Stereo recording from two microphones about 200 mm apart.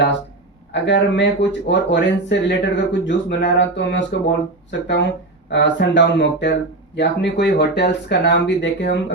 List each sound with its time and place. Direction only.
0.7 s speech: 65° left (ahead or behind)
5.5 s speech: 60° left (ahead or behind)